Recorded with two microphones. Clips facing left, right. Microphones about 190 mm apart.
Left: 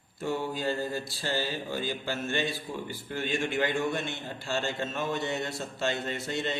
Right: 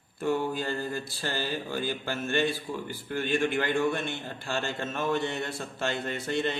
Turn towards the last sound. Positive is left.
turn(degrees=-55)  # may be behind; listen again after turning